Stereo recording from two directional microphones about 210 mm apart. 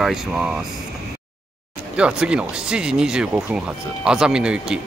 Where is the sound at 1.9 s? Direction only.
5° right (ahead or behind).